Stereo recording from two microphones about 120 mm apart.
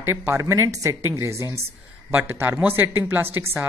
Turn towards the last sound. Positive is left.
turn(degrees=-20)  # may be behind; listen again after turning